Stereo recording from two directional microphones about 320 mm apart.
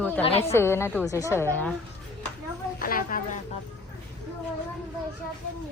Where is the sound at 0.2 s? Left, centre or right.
Centre.